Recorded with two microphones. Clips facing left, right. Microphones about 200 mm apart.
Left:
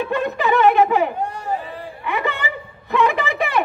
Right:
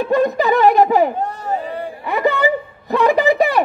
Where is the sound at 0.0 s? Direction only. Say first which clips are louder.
Right 5 dB; 40° right (ahead or behind).